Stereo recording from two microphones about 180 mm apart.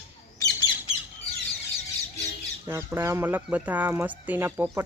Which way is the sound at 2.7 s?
15° right (ahead or behind).